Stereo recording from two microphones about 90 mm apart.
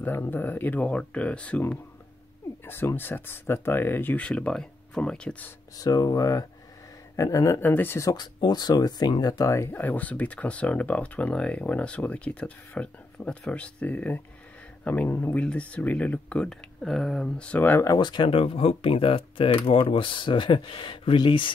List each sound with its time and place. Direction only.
0.0 s speech: 20° left (ahead or behind)
2.6 s speech: 25° left (ahead or behind)
4.2 s speech: 10° left (ahead or behind)
5.8 s speech: 45° left (ahead or behind)
7.6 s speech: 20° left (ahead or behind)
8.0 s speech: 50° left (ahead or behind)
9.5 s speech: 35° left (ahead or behind)
9.8 s speech: 20° left (ahead or behind)
17.8 s speech: 55° left (ahead or behind)